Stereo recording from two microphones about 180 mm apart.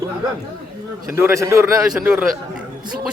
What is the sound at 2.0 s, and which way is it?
Speech, 5° right (ahead or behind).